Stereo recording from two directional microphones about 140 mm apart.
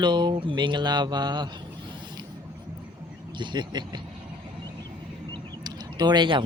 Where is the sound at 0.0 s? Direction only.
30° right (ahead or behind).